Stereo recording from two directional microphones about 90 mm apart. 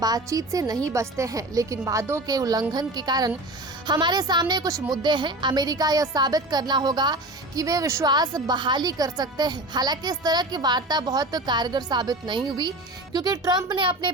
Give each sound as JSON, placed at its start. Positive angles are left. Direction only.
{"t": 0.0, "sound": "speech", "side_deg": -45}
{"t": 2.2, "sound": "a woman's voice", "side_deg": -45}
{"t": 8.0, "sound": "a woman's voice", "side_deg": -50}